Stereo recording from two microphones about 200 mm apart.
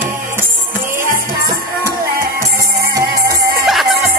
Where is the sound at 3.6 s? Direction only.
Centre (ahead or behind).